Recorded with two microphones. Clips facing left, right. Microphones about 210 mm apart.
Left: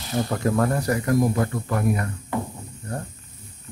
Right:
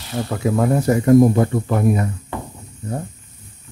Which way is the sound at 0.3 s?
5° right (ahead or behind).